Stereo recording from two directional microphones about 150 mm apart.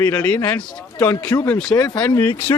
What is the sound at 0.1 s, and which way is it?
Speech, 10° left (ahead or behind).